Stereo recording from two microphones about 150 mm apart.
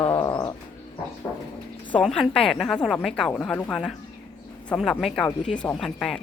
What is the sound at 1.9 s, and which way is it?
A woman's voice, 5° left (ahead or behind).